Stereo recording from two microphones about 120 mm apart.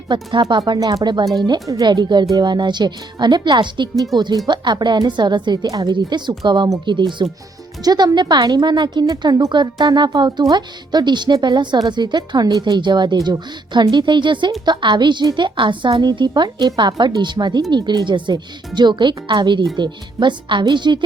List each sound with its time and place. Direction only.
0.1 s a woman's voice: 40° right (ahead or behind)